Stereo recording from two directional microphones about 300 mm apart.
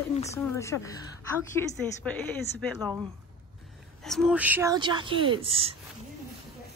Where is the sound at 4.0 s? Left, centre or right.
Centre.